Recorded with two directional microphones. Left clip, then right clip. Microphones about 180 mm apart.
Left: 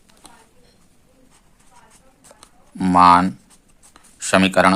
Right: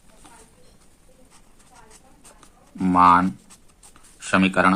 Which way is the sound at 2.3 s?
40° left (ahead or behind).